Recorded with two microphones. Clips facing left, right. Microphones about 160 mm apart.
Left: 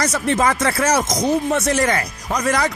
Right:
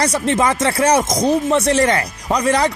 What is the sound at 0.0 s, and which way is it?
Speech, 25° right (ahead or behind).